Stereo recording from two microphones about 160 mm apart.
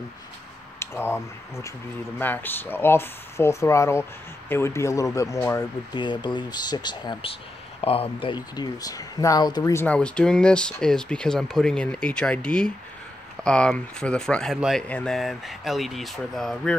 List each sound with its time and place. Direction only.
0.7 s speech: 15° left (ahead or behind)
5.9 s speech: 30° left (ahead or behind)
9.8 s speech: 5° left (ahead or behind)